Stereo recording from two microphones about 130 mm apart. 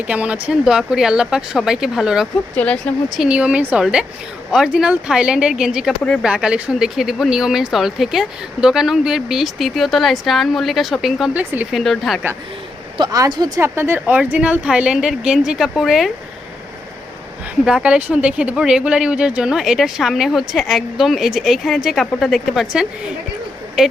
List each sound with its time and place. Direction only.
0.1 s a woman's voice: 10° right (ahead or behind)
2.6 s speech: 10° left (ahead or behind)
3.2 s a woman's voice: 10° right (ahead or behind)
13.0 s speech: 30° right (ahead or behind)
13.6 s a woman's voice: 20° right (ahead or behind); by 16.1 s centre (ahead or behind)
17.7 s speech: 10° right (ahead or behind)
23.8 s speech: 5° right (ahead or behind)